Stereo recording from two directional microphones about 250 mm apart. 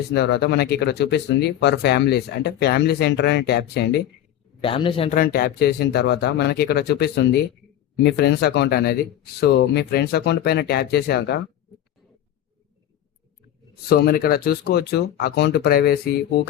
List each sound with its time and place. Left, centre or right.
0.1 s speech: left
4.6 s a man's voice: left
5.1 s speech: left
13.9 s speech: left